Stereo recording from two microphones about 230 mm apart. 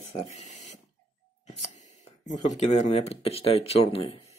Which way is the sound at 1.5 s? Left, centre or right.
Left.